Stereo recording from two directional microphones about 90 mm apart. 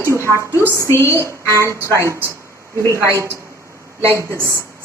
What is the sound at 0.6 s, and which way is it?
Speech, 30° right (ahead or behind).